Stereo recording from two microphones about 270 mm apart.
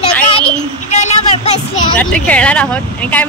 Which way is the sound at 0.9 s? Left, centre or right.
Left.